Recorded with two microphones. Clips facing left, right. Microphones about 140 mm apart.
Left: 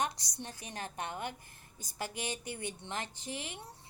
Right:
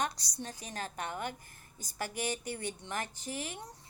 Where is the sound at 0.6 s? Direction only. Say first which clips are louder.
Even; 20° left (ahead or behind).